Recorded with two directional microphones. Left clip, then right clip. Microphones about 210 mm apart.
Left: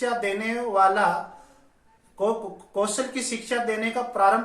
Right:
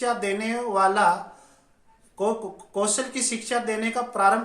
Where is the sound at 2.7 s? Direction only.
40° right (ahead or behind).